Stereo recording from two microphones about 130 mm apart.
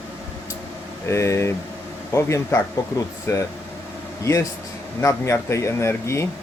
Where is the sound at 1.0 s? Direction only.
20° left (ahead or behind).